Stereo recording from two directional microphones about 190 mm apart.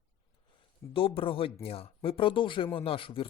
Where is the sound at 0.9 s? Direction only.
30° left (ahead or behind).